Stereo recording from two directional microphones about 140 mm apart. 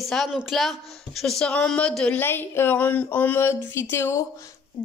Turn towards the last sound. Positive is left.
turn(degrees=20)  # may be behind; listen again after turning